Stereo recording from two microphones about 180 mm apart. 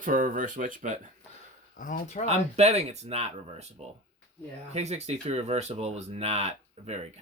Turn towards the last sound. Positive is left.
turn(degrees=-35)  # may be behind; listen again after turning